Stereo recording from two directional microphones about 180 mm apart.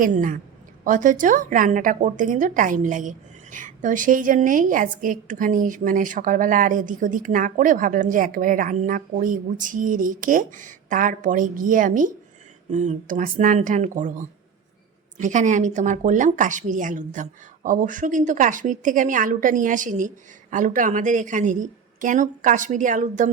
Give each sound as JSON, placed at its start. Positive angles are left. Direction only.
{"t": 0.0, "sound": "a woman's voice", "side_deg": -45}
{"t": 15.2, "sound": "a woman's voice", "side_deg": -45}